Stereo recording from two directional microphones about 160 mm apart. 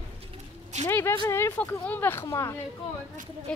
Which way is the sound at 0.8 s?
15° left (ahead or behind).